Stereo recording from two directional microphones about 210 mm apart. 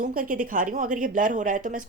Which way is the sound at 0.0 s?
40° right (ahead or behind).